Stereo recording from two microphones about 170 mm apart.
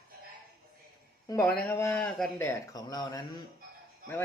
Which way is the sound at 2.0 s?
Centre (ahead or behind).